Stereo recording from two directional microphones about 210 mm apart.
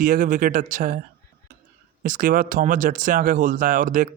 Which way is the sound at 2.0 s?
40° right (ahead or behind).